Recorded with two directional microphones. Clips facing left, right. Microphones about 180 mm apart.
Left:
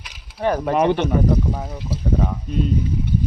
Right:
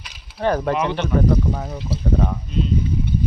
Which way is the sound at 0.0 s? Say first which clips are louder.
Even; 10° left (ahead or behind).